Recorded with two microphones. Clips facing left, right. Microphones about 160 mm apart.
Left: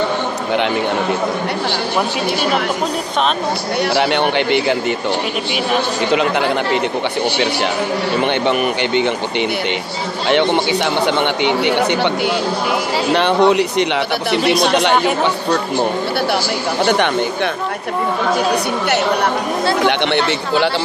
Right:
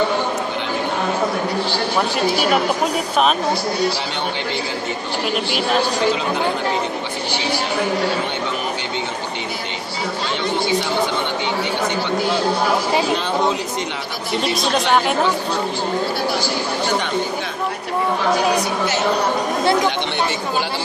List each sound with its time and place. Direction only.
3.8 s speech: 70° left (ahead or behind)
6.1 s speech: 70° left (ahead or behind)
8.2 s speech: 70° left (ahead or behind)
10.2 s speech: 70° left (ahead or behind)
13.1 s speech: 75° left (ahead or behind)
19.8 s speech: 70° left (ahead or behind)